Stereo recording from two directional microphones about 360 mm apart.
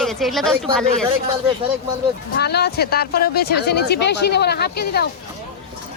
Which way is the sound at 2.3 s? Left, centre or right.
Left.